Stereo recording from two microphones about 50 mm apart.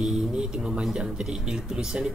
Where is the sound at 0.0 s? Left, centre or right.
Centre.